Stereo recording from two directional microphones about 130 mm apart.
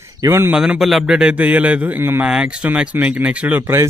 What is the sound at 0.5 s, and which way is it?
A man's voice, 5° right (ahead or behind).